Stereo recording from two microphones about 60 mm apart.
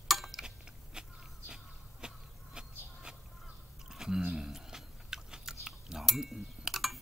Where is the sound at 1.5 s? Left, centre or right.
Centre.